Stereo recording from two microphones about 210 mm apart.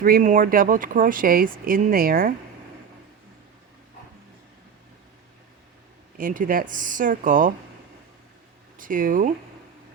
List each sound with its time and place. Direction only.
0.0 s speech: 40° right (ahead or behind)
6.1 s speech: 40° right (ahead or behind)
8.8 s speech: 40° right (ahead or behind)